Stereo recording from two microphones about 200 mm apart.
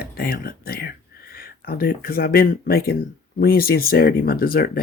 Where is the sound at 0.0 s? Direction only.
50° left (ahead or behind).